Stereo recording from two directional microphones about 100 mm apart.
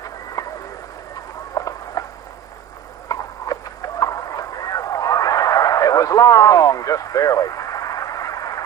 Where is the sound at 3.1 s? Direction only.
35° left (ahead or behind).